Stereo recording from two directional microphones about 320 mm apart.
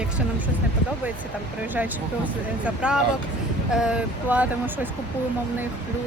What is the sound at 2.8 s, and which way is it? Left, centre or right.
Speech, centre.